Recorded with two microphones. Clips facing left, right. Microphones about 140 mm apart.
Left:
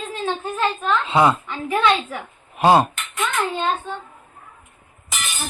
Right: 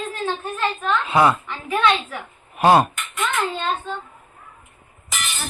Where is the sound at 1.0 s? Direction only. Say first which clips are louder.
Even; 25° left (ahead or behind).